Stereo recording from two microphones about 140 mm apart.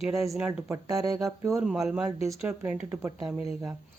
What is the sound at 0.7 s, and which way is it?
Speech, 25° right (ahead or behind).